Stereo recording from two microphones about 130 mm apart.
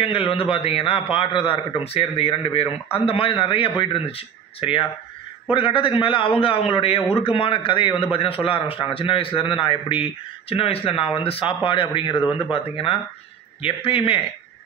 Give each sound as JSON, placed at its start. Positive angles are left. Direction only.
{"t": 0.0, "sound": "a man's voice", "side_deg": 45}